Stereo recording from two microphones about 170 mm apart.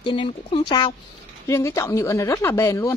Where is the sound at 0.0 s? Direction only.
30° left (ahead or behind).